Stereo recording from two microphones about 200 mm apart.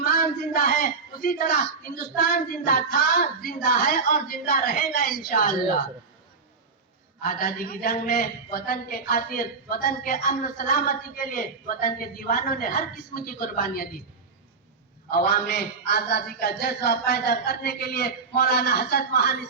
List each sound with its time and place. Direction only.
0.0 s a man's voice: 45° left (ahead or behind)
7.3 s a woman's voice: 45° left (ahead or behind)
15.1 s a woman's voice: 50° left (ahead or behind)